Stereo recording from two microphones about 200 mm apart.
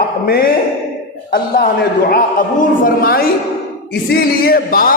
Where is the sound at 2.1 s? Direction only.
45° left (ahead or behind).